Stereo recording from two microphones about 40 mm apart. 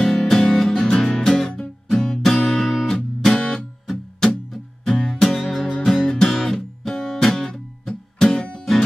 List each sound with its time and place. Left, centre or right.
0.0 s music: centre
2.9 s music: centre
6.3 s music: centre
7.2 s guitar: centre
8.2 s music: centre